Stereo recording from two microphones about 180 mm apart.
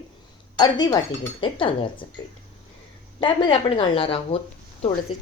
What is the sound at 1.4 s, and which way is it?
Speech, 30° left (ahead or behind).